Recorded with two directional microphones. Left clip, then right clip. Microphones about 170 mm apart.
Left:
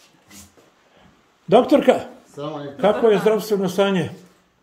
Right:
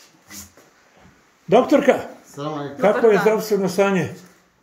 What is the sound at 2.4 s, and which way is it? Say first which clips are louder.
Speech: right 1 dB; 70° right (ahead or behind).